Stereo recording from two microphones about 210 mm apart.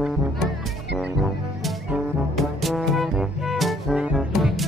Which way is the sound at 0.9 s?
Centre (ahead or behind).